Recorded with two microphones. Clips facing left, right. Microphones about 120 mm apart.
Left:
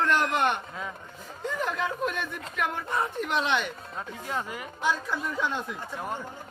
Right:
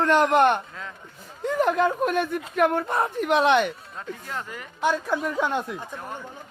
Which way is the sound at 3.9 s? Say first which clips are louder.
Left 1 dB; 15° left (ahead or behind).